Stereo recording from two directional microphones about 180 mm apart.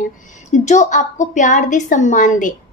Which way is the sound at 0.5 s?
40° left (ahead or behind).